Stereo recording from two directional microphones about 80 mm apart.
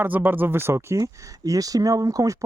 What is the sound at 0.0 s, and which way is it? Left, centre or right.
Speech, right.